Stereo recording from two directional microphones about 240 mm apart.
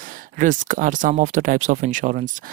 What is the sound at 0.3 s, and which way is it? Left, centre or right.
Speech, right.